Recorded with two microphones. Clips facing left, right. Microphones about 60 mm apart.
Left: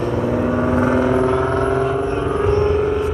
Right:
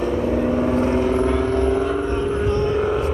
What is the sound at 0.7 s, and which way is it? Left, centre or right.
Vehicle, left.